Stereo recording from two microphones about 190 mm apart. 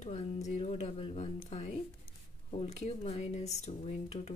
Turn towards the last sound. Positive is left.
turn(degrees=35)  # may be behind; listen again after turning